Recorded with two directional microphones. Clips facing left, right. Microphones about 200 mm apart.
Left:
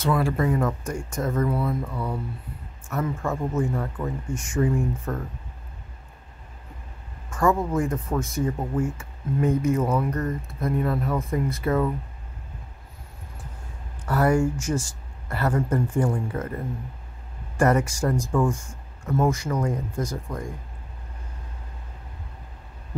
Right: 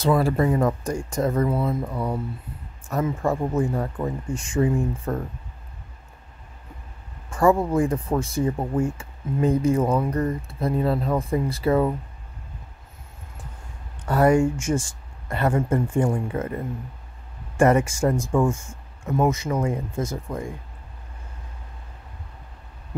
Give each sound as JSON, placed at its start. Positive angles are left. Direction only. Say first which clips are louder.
{"t": 0.0, "sound": "speech", "louder": "right 3 dB", "side_deg": -30}
{"t": 3.2, "sound": "speech", "louder": "right 4 dB", "side_deg": -35}
{"t": 7.2, "sound": "speech", "louder": "right 3 dB", "side_deg": -30}
{"t": 9.9, "sound": "speech", "louder": "right 2 dB", "side_deg": -15}
{"t": 10.6, "sound": "speech", "louder": "right 2 dB", "side_deg": -30}
{"t": 14.0, "sound": "speech", "louder": "right 3 dB", "side_deg": -25}
{"t": 17.6, "sound": "speech", "louder": "right 3 dB", "side_deg": -25}